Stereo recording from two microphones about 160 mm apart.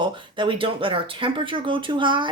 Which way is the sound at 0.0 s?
30° right (ahead or behind).